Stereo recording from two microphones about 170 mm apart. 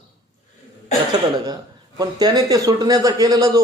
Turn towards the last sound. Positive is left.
turn(degrees=-20)  # may be behind; listen again after turning